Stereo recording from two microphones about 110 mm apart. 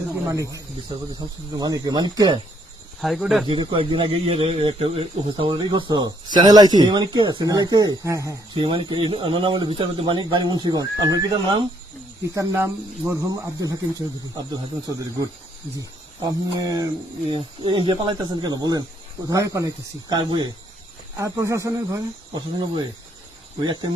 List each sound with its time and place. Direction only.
0.3 s speech: 30° right (ahead or behind)
3.0 s speech: centre (ahead or behind)
3.4 s speech: 45° right (ahead or behind)
5.5 s speech: 40° right (ahead or behind)
8.5 s speech: 50° right (ahead or behind)
17.2 s speech: 45° right (ahead or behind)
21.2 s speech: 25° right (ahead or behind)
22.4 s speech: 45° right (ahead or behind)